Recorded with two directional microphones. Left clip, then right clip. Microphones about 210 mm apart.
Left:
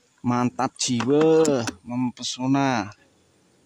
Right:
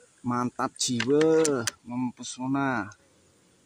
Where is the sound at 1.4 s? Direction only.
40° left (ahead or behind).